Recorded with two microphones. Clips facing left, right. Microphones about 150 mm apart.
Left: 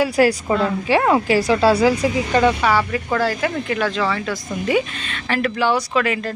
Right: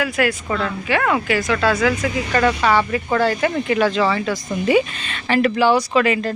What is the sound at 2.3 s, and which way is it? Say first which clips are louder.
Speech: right 1 dB; 10° left (ahead or behind).